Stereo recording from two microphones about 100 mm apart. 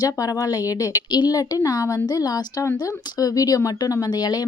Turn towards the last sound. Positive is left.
turn(degrees=45)  # may be behind; listen again after turning